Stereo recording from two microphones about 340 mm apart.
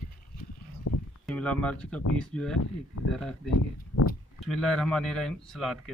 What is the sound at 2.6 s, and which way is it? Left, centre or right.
Speech, left.